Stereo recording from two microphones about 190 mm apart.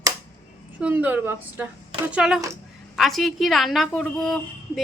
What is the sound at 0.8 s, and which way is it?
A woman's voice, 5° right (ahead or behind).